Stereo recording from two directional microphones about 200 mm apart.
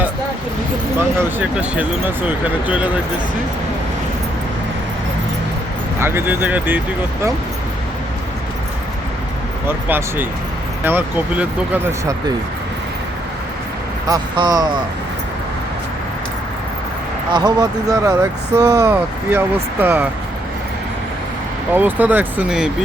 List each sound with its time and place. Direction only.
0.9 s speech: 5° right (ahead or behind)
6.0 s speech: 10° right (ahead or behind)
9.6 s speech: 10° right (ahead or behind)
14.1 s speech: 20° right (ahead or behind)
17.3 s speech: 20° right (ahead or behind)
21.7 s speech: 10° right (ahead or behind)